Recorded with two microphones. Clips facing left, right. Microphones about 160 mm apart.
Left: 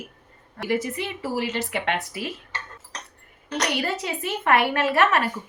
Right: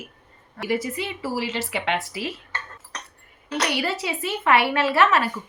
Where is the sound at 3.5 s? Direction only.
45° left (ahead or behind).